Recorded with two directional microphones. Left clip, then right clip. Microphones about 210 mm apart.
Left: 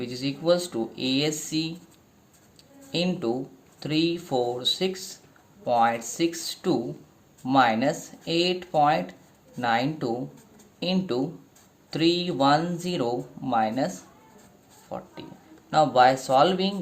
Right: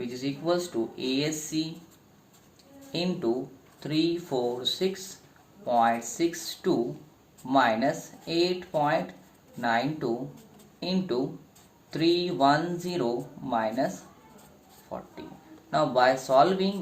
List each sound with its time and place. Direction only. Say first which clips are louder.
0.0 s speech: left 4 dB; 55° left (ahead or behind)
2.9 s speech: left 2 dB; 55° left (ahead or behind)
15.7 s speech: left 4 dB; 50° left (ahead or behind)